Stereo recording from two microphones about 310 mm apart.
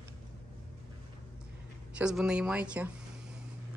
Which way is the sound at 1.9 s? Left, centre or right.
Centre.